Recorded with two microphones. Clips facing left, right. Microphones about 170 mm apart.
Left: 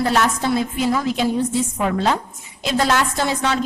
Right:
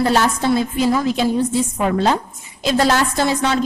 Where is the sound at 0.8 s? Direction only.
35° right (ahead or behind).